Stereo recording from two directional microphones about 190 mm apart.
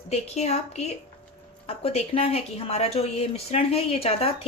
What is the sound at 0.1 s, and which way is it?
Speech, 35° left (ahead or behind).